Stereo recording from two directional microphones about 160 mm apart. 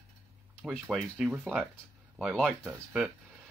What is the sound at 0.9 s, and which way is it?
Speech, centre (ahead or behind).